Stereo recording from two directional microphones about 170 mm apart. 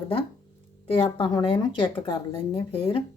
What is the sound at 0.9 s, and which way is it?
Speech, 30° left (ahead or behind).